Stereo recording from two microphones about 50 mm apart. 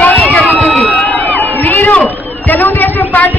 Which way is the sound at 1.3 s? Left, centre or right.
Left.